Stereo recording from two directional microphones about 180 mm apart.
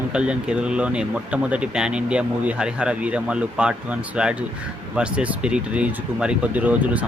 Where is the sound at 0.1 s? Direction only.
5° right (ahead or behind).